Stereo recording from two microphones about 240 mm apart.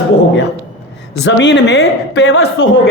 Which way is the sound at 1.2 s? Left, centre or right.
Left.